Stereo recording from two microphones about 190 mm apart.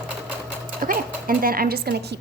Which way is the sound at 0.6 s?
45° right (ahead or behind).